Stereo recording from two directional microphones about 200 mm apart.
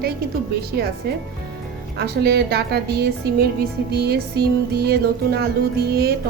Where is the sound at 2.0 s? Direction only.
55° right (ahead or behind).